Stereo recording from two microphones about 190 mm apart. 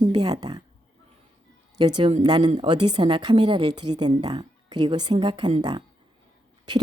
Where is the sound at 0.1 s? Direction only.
20° right (ahead or behind).